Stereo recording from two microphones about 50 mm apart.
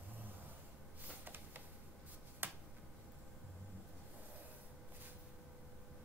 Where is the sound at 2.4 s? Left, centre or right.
Right.